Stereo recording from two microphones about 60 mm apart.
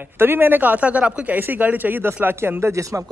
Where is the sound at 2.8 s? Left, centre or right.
Right.